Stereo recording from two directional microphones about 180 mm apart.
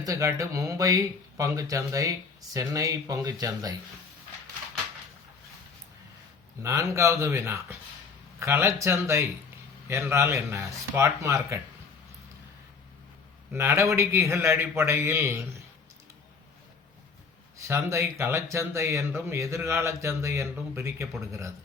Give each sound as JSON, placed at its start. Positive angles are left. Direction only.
{"t": 0.0, "sound": "speech", "side_deg": -20}
{"t": 6.6, "sound": "speech", "side_deg": -15}
{"t": 13.5, "sound": "speech", "side_deg": -15}
{"t": 17.6, "sound": "speech", "side_deg": -15}